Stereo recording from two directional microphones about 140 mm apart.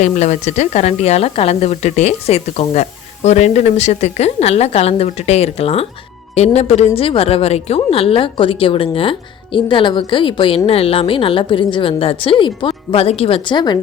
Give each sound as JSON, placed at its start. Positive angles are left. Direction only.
{"t": 0.0, "sound": "a woman's voice", "side_deg": 60}